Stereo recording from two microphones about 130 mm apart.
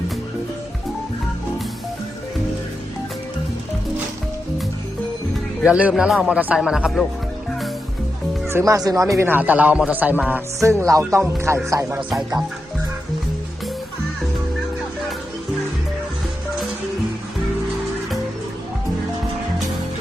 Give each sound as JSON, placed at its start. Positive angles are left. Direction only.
{"t": 5.6, "sound": "speech", "side_deg": -5}
{"t": 8.4, "sound": "speech", "side_deg": -20}
{"t": 10.6, "sound": "music", "side_deg": -20}